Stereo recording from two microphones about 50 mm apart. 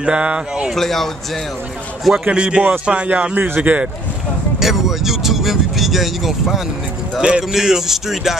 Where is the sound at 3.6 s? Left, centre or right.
Right.